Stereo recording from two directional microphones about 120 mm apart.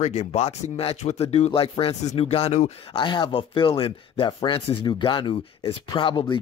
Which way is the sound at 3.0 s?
40° left (ahead or behind).